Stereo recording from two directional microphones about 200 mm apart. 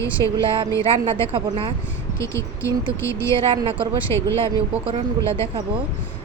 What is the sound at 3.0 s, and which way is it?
Speech, 15° left (ahead or behind).